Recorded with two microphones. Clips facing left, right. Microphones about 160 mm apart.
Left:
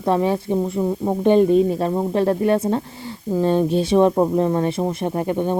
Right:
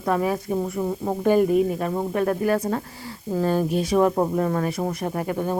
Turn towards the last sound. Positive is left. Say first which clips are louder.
# left 4 dB
turn(degrees=25)  # may be behind; listen again after turning